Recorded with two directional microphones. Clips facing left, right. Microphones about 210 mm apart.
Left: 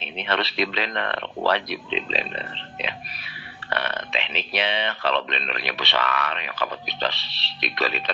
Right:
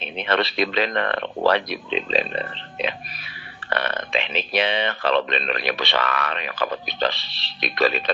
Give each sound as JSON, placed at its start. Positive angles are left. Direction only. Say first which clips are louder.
{"t": 0.0, "sound": "speech", "louder": "right 4 dB", "side_deg": -45}